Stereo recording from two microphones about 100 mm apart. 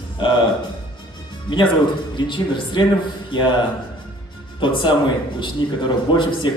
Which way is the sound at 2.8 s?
45° left (ahead or behind).